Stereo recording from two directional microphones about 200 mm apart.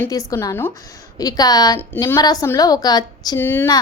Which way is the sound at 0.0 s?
15° left (ahead or behind).